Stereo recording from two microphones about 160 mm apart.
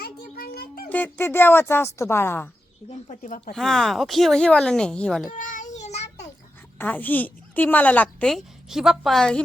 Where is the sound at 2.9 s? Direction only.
50° left (ahead or behind).